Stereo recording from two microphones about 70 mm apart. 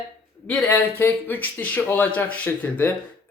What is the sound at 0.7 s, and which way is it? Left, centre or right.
Speech, left.